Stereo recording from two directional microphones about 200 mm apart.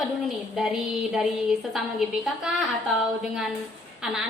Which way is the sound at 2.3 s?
Centre (ahead or behind).